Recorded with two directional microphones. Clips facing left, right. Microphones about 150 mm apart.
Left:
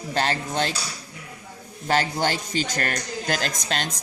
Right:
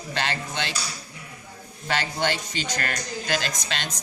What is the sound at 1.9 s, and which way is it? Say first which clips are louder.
Speech: left 3 dB; 40° left (ahead or behind).